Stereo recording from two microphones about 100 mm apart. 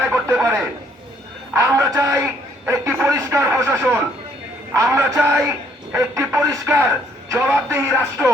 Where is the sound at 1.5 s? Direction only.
35° right (ahead or behind).